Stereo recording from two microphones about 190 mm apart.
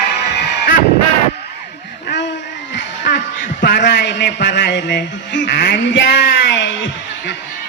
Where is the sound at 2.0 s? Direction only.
65° left (ahead or behind).